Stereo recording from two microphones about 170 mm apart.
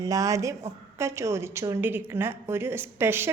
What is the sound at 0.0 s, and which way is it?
A woman's voice, 20° right (ahead or behind).